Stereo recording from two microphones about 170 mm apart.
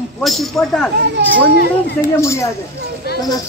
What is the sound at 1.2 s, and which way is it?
Speech, 85° right.